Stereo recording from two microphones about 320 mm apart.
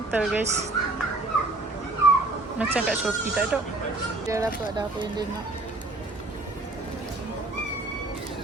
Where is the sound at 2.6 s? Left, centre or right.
Centre.